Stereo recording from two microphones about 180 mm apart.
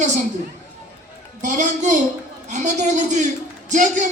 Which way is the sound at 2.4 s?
40° right (ahead or behind).